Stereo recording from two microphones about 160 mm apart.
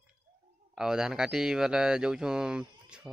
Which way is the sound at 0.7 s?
5° right (ahead or behind).